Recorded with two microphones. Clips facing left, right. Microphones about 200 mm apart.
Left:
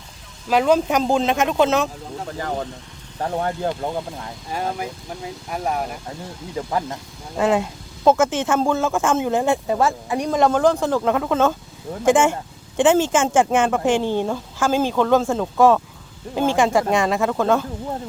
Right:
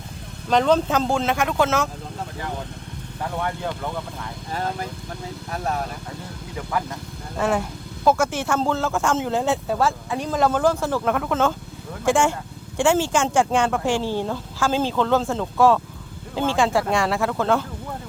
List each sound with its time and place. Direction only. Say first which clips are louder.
0.4 s speech: left 1 dB; 10° left (ahead or behind)
2.4 s speech: left 6 dB; 60° left (ahead or behind)
3.2 s speech: left 4 dB; 40° left (ahead or behind)
5.5 s speech: left 2 dB; 10° left (ahead or behind)
6.6 s speech: left 3 dB; 30° left (ahead or behind)
7.3 s speech: left 4 dB; 20° left (ahead or behind)